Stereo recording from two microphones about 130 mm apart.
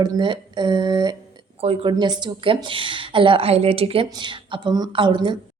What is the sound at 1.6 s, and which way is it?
Speech, 50° right (ahead or behind).